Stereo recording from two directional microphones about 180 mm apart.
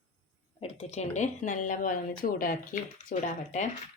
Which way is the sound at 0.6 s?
35° left (ahead or behind).